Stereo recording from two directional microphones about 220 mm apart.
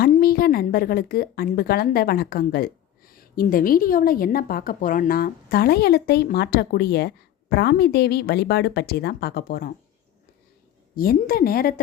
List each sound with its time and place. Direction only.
0.0 s a woman's voice: 45° left (ahead or behind)
10.9 s a woman's voice: 40° left (ahead or behind)